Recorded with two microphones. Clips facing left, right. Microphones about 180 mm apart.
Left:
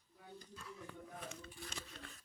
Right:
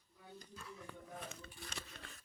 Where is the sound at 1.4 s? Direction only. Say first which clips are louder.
Left 1 dB; 65° right (ahead or behind).